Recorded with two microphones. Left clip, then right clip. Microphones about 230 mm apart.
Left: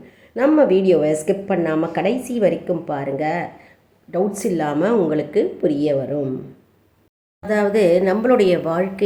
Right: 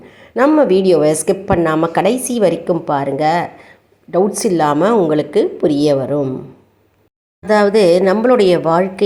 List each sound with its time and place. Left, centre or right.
0.1 s a woman's voice: centre
7.4 s a woman's voice: centre